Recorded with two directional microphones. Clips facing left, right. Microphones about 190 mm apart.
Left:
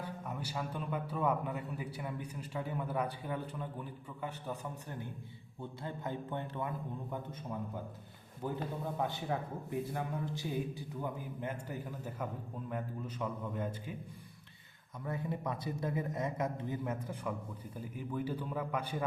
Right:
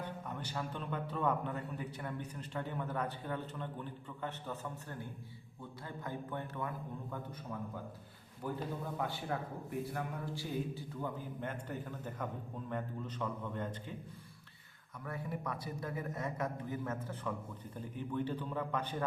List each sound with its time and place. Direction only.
0.3 s a man's voice: 10° left (ahead or behind)
8.4 s a man's voice: 20° left (ahead or behind)
15.0 s a man's voice: 20° left (ahead or behind)